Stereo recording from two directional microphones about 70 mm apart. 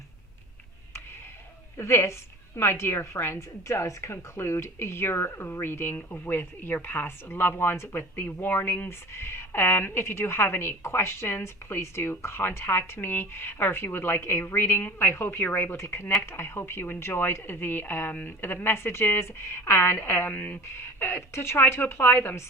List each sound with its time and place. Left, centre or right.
1.8 s speech: left